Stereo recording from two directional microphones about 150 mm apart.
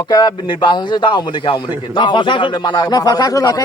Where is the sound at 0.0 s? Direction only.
30° left (ahead or behind).